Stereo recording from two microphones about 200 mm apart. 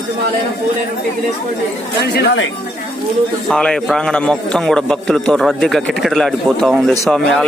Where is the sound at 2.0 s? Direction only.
55° left (ahead or behind).